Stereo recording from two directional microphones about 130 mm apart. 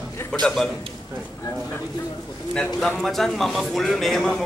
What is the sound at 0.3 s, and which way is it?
Speech, centre (ahead or behind).